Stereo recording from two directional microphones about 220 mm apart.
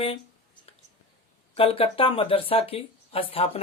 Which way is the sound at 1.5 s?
25° left (ahead or behind).